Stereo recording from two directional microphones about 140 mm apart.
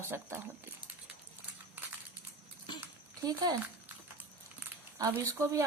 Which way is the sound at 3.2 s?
25° right (ahead or behind).